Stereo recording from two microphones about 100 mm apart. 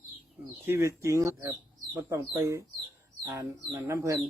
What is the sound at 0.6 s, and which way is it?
Speech, 25° right (ahead or behind).